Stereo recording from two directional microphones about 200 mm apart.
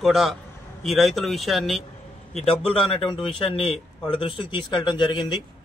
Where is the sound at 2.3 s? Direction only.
30° left (ahead or behind).